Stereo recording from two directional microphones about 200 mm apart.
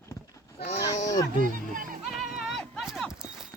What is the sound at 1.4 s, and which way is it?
Speech, 45° right (ahead or behind).